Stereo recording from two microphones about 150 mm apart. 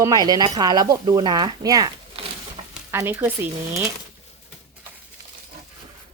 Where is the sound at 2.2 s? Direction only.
40° right (ahead or behind).